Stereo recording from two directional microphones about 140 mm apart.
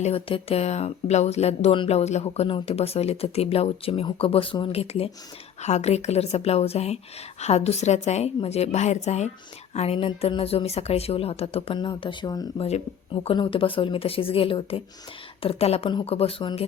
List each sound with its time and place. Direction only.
0.0 s speech: 40° left (ahead or behind)
12.5 s speech: 45° left (ahead or behind)
15.9 s speech: 30° left (ahead or behind)